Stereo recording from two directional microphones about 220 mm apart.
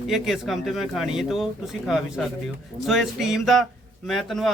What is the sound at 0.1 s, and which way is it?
A man's voice, centre (ahead or behind).